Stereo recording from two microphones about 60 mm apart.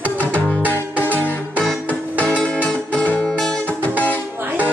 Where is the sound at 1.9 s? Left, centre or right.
Left.